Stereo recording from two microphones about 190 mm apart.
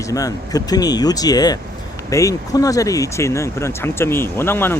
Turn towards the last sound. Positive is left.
turn(degrees=10)  # may be behind; listen again after turning